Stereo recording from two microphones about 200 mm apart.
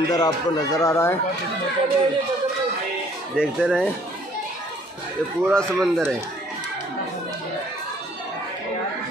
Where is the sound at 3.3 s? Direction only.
5° left (ahead or behind).